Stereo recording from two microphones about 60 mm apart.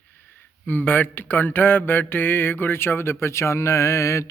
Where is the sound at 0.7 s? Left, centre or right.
Left.